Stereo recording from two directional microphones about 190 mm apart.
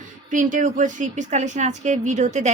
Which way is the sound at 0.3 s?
45° right (ahead or behind).